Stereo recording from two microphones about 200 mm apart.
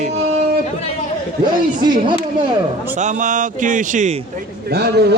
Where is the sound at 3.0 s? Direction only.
40° right (ahead or behind).